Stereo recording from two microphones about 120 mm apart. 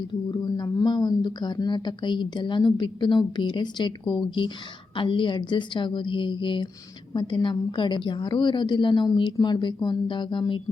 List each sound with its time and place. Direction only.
0.1 s a woman's voice: 35° left (ahead or behind)